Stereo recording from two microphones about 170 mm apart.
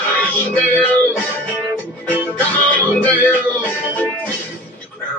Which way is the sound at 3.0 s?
10° left (ahead or behind).